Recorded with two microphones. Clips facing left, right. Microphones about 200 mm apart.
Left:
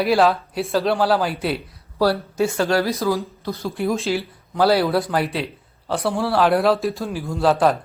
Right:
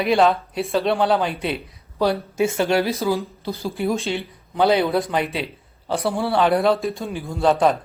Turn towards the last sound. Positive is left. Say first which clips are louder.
# even
turn(degrees=0)  # may be behind; listen again after turning